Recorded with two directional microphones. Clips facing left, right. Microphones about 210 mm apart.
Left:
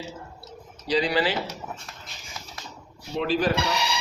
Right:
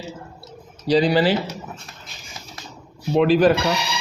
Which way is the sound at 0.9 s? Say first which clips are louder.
Right 7 dB; 35° right (ahead or behind).